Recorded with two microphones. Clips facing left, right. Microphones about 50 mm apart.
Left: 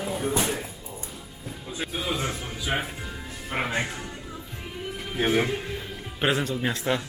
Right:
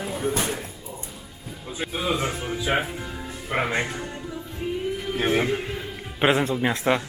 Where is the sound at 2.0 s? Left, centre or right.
Right.